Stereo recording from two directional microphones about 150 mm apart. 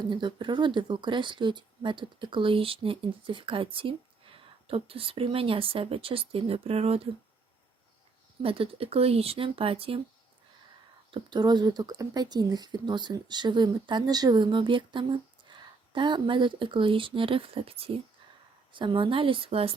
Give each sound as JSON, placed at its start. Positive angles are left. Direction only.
{"t": 0.1, "sound": "speech", "side_deg": -30}
{"t": 8.4, "sound": "speech", "side_deg": -40}
{"t": 11.1, "sound": "speech", "side_deg": -30}